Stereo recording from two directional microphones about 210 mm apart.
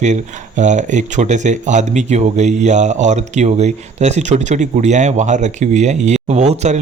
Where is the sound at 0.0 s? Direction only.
35° right (ahead or behind).